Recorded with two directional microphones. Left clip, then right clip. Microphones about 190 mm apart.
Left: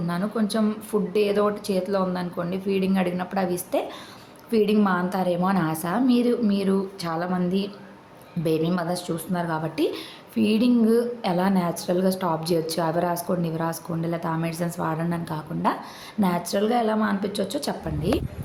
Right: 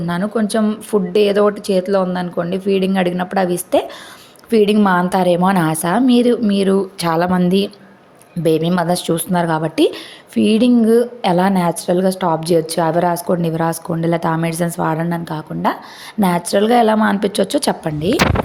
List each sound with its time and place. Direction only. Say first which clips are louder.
0.1 s a woman's voice: right 9 dB; 35° right (ahead or behind)